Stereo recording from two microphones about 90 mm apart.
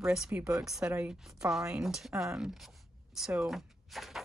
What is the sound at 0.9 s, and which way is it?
Speech, 20° right (ahead or behind).